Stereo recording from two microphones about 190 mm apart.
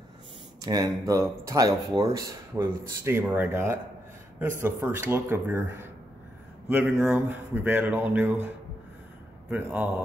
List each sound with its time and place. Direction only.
0.6 s speech: 20° right (ahead or behind)
9.5 s speech: 10° right (ahead or behind)